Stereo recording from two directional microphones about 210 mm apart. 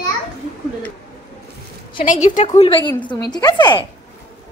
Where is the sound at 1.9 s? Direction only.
40° left (ahead or behind).